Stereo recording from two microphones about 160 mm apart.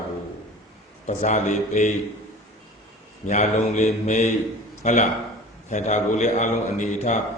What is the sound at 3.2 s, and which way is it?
A man's voice, 45° left (ahead or behind).